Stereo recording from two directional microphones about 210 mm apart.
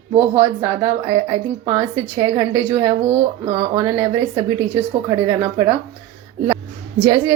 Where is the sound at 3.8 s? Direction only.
15° right (ahead or behind).